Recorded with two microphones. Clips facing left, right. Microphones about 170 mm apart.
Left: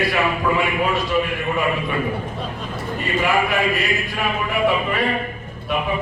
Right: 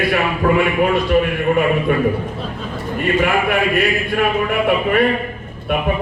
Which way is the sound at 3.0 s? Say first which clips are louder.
Right 4 dB; 55° right (ahead or behind).